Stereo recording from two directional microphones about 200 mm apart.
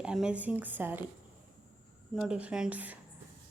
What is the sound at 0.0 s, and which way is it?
A woman's voice, 5° right (ahead or behind).